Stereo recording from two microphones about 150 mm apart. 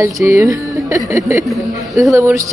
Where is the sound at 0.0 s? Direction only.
20° right (ahead or behind).